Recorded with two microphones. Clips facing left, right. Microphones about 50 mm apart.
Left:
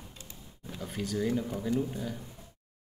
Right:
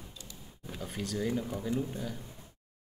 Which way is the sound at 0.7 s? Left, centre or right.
Centre.